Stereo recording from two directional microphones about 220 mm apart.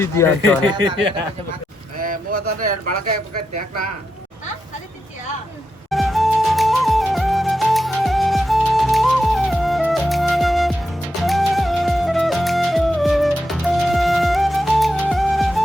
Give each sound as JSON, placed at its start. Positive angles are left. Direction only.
{"t": 0.0, "sound": "speech", "side_deg": 10}
{"t": 0.7, "sound": "speech", "side_deg": -20}
{"t": 2.6, "sound": "speech", "side_deg": -40}
{"t": 5.9, "sound": "music", "side_deg": 0}